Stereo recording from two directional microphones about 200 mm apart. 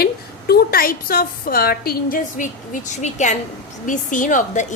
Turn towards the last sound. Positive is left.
turn(degrees=35)  # may be behind; listen again after turning